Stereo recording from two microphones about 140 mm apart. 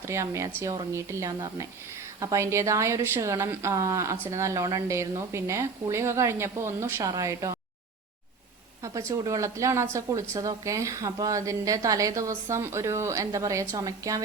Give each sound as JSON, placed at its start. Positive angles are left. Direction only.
{"t": 0.1, "sound": "speech", "side_deg": -20}
{"t": 8.8, "sound": "speech", "side_deg": -20}